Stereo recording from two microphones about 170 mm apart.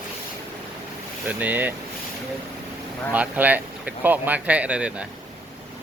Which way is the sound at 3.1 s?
10° right (ahead or behind).